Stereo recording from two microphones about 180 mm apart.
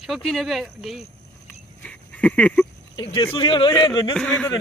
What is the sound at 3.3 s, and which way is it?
Speech, 30° left (ahead or behind).